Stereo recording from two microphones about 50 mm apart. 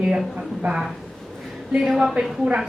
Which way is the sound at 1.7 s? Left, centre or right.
Centre.